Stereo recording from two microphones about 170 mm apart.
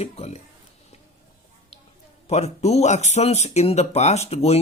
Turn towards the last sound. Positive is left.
turn(degrees=35)  # may be behind; listen again after turning